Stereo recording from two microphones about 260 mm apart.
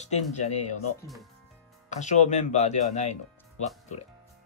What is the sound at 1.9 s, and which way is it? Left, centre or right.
Speech, left.